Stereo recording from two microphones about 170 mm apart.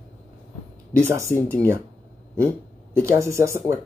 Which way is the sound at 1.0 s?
15° right (ahead or behind).